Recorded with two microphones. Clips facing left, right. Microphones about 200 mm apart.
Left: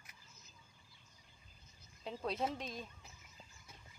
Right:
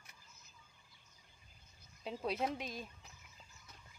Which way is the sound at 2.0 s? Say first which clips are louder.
Right 1 dB; 10° right (ahead or behind).